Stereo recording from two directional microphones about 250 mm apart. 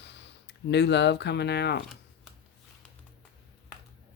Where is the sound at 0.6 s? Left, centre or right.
Left.